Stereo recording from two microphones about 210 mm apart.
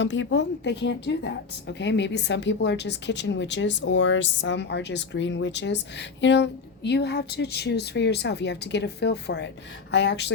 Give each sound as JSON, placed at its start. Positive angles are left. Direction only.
{"t": 0.0, "sound": "a woman's voice", "side_deg": 60}